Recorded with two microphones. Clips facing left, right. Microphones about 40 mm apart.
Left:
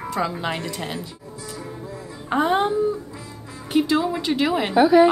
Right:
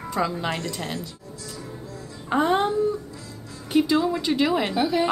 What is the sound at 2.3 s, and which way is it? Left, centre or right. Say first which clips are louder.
Speech: left 1 dB; centre.